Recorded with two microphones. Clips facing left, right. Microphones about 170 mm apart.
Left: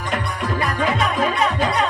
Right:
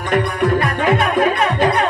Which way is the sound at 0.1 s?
60° right (ahead or behind).